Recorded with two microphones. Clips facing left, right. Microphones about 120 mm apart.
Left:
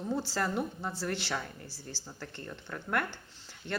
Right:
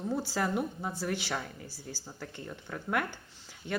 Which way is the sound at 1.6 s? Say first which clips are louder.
Right 1 dB; 15° right (ahead or behind).